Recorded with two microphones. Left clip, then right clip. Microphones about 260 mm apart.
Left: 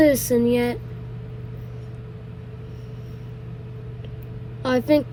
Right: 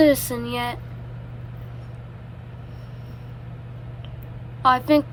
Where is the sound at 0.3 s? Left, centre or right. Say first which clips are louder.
Left 10 dB; right.